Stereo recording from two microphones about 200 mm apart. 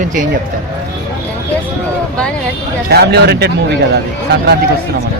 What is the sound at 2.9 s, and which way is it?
Speech, 55° right (ahead or behind).